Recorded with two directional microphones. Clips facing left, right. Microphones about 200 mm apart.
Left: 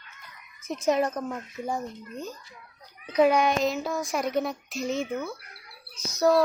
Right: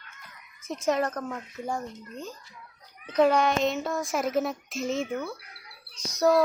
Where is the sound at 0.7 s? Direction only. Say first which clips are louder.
Left 2 dB; 15° left (ahead or behind).